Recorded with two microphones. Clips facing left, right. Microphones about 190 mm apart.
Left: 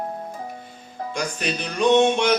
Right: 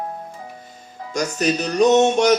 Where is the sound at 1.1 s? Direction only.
40° right (ahead or behind).